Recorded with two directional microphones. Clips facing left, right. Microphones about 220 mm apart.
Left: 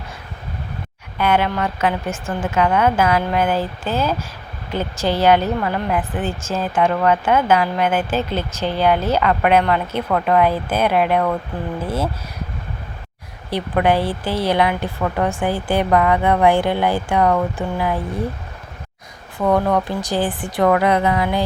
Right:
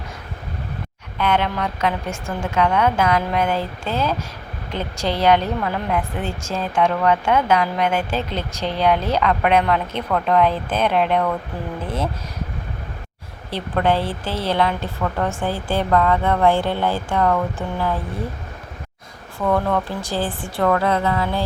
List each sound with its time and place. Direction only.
1.2 s speech: 5° left (ahead or behind)
13.5 s a woman's voice: 15° left (ahead or behind)
19.4 s a woman's voice: 15° left (ahead or behind)